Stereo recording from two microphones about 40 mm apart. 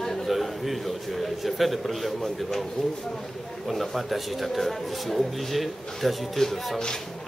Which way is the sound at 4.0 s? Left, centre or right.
Centre.